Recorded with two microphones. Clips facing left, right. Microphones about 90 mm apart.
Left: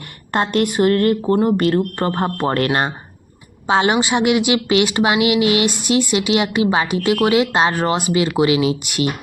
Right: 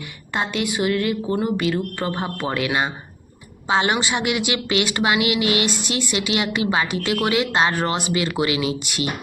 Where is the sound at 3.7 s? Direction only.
25° left (ahead or behind).